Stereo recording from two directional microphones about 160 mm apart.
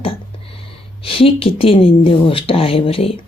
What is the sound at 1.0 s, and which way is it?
A woman's voice, 35° left (ahead or behind).